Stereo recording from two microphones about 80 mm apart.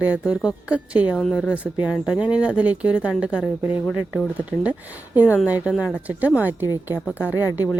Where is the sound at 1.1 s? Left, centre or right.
Centre.